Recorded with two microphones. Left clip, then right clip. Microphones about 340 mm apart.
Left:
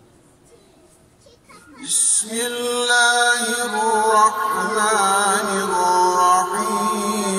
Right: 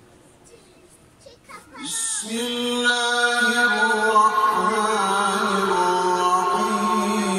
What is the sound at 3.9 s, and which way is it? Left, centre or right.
Mantra, left.